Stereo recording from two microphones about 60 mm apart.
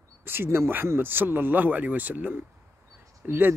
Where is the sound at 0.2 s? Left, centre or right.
Right.